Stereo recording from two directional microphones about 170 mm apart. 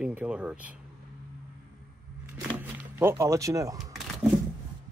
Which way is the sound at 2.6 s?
15° right (ahead or behind).